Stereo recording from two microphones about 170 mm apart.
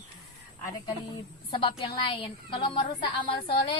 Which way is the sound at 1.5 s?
30° left (ahead or behind).